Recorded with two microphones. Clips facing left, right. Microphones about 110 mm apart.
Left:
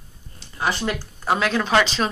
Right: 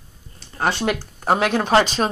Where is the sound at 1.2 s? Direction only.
55° right (ahead or behind).